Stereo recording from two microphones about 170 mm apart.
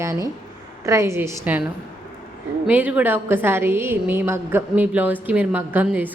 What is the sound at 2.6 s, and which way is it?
A woman's voice, 10° right (ahead or behind).